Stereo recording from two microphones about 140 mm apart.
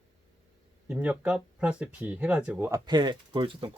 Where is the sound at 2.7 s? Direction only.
30° right (ahead or behind).